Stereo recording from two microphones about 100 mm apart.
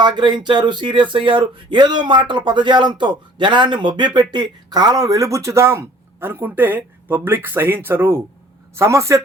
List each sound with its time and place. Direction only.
0.0 s speech: 50° right (ahead or behind); by 9.2 s 30° right (ahead or behind)